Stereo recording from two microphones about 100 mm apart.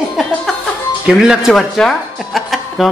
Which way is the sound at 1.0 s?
10° right (ahead or behind).